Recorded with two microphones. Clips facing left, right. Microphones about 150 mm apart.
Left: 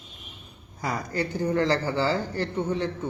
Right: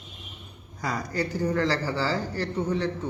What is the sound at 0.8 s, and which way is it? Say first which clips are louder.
Speech: even; 25° left (ahead or behind).